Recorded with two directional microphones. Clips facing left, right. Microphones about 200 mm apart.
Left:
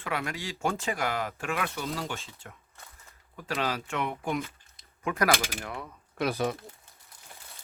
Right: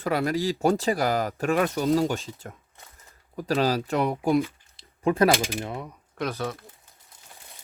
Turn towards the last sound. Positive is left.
turn(degrees=15)  # may be behind; listen again after turning